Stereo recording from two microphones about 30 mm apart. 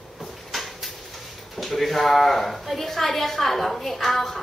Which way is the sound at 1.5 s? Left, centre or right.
Centre.